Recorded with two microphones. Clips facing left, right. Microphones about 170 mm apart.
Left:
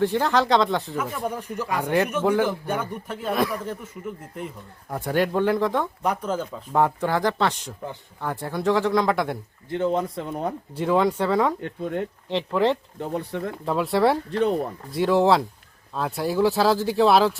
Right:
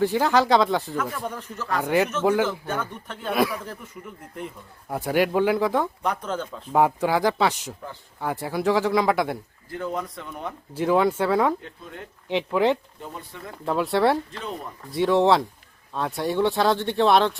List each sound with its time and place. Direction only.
0.0 s speech: 5° right (ahead or behind)
0.9 s speech: 10° left (ahead or behind)
1.8 s speech: 5° right (ahead or behind)
2.4 s speech: 10° left (ahead or behind); by 5.9 s 5° right (ahead or behind)
6.0 s speech: 5° left (ahead or behind)
6.7 s speech: 5° right (ahead or behind)
9.6 s speech: 25° left (ahead or behind)
10.8 s speech: 5° right (ahead or behind)
13.0 s speech: 70° left (ahead or behind)
13.7 s speech: centre (ahead or behind)